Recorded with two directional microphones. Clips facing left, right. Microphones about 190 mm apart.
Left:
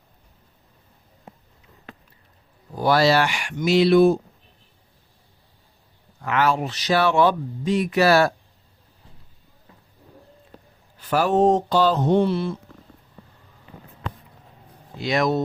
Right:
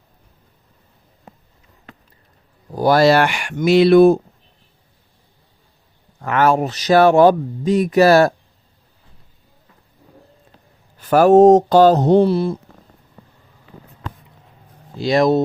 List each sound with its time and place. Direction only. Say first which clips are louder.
2.7 s speech: right 5 dB; 45° right (ahead or behind)
6.2 s speech: right 6 dB; 50° right (ahead or behind)
11.1 s speech: right 9 dB; 45° right (ahead or behind)
14.9 s speech: right 7 dB; 35° right (ahead or behind)